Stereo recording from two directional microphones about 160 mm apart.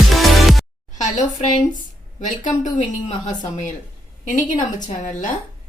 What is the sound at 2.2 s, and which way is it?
A woman's voice, 50° left (ahead or behind).